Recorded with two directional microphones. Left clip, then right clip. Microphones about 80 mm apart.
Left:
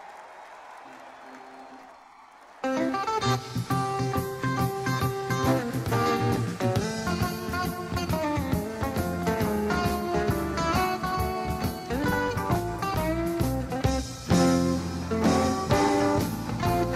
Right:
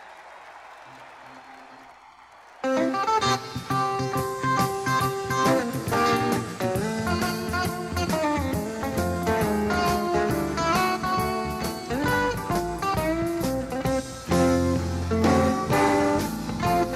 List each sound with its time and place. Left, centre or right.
2.6 s music: right